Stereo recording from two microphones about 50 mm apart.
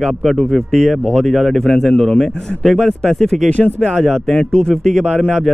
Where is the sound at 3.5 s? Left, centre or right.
Left.